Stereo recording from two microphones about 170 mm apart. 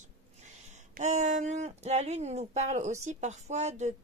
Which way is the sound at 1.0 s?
45° right (ahead or behind).